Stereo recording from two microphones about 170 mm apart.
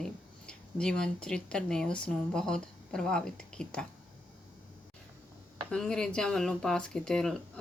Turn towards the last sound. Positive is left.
turn(degrees=5)  # may be behind; listen again after turning